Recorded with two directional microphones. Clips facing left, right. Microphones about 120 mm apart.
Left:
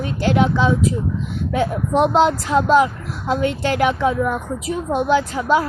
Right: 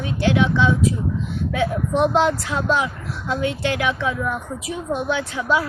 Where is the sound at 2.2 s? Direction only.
40° left (ahead or behind).